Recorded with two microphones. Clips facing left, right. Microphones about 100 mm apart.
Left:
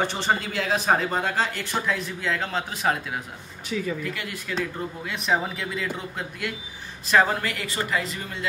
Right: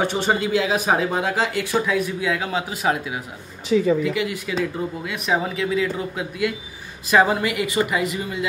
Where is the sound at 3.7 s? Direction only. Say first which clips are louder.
Right 10 dB; 30° right (ahead or behind).